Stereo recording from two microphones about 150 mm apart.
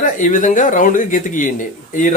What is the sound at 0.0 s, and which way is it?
Speech, 60° left (ahead or behind).